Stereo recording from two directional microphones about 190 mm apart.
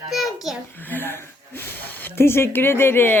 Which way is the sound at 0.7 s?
10° left (ahead or behind).